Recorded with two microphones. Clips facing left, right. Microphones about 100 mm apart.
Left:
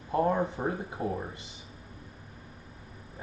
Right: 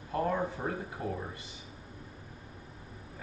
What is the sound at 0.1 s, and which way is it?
Mantra, 20° left (ahead or behind).